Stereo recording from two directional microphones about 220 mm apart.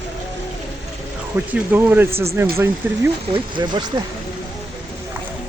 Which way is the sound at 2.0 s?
25° right (ahead or behind).